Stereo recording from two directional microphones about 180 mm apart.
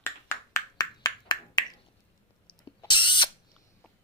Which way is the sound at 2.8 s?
25° left (ahead or behind).